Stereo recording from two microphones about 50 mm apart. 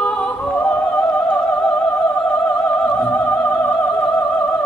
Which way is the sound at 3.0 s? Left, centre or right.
Left.